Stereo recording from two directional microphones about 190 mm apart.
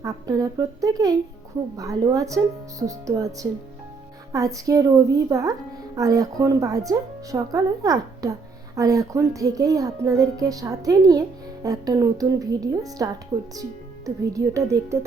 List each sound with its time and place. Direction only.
0.0 s a woman's voice: 20° right (ahead or behind)